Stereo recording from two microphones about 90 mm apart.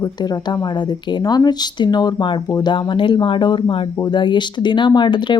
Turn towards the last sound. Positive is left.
turn(degrees=60)  # may be behind; listen again after turning